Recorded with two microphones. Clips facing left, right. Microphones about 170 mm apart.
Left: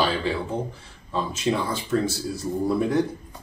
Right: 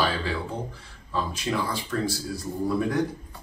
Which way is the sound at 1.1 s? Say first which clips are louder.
Left 3 dB; 25° left (ahead or behind).